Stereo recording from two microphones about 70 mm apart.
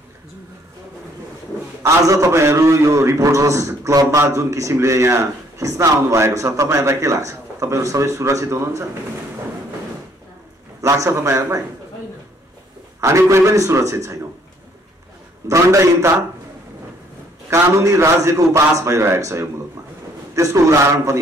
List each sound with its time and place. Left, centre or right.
1.8 s a man's voice: right
10.8 s a man's voice: right
13.0 s a man's voice: right
15.4 s a man's voice: right
17.5 s a man's voice: right